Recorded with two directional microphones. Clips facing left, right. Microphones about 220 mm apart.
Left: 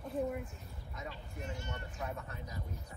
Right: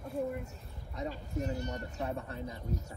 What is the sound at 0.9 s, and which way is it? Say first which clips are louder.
Speech: right 9 dB; 40° right (ahead or behind).